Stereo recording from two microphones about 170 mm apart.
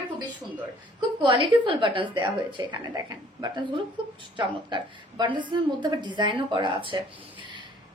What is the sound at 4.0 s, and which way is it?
A woman's voice, 30° right (ahead or behind).